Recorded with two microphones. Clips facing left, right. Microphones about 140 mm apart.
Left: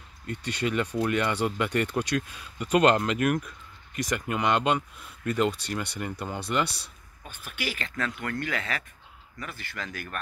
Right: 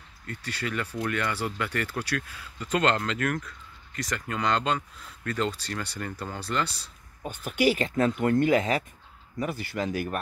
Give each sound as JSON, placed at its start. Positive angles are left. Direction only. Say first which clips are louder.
{"t": 0.3, "sound": "speech", "louder": "left 4 dB", "side_deg": 20}
{"t": 7.5, "sound": "speech", "louder": "right 11 dB", "side_deg": -15}
{"t": 7.9, "sound": "speech", "louder": "right 9 dB", "side_deg": -25}